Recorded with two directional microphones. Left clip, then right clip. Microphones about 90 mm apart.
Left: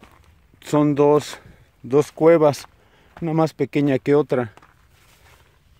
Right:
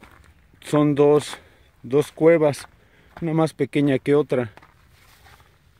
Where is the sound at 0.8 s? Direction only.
15° left (ahead or behind).